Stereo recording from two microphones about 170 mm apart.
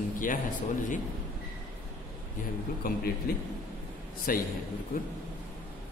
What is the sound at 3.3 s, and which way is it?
A man's voice, 60° left (ahead or behind).